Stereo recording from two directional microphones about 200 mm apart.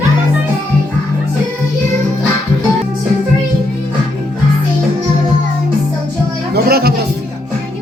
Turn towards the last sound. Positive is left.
turn(degrees=-50)  # may be behind; listen again after turning